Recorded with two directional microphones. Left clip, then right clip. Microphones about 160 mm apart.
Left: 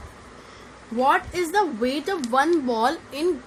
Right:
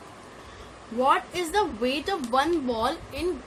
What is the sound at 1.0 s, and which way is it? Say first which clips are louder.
A woman's voice: left 3 dB; 50° left (ahead or behind).